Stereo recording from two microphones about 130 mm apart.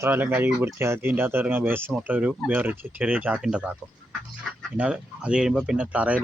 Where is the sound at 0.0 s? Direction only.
15° right (ahead or behind).